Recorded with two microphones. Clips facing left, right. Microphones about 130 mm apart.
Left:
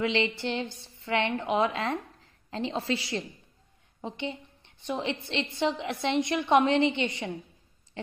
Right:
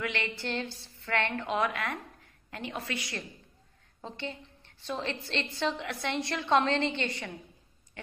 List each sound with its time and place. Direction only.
0.0 s a woman's voice: 25° left (ahead or behind)